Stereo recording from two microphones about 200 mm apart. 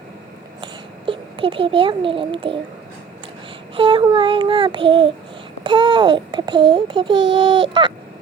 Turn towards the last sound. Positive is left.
turn(degrees=-25)  # may be behind; listen again after turning